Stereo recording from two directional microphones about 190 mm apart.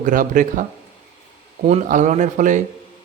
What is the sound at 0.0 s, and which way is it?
Speech, 45° right (ahead or behind).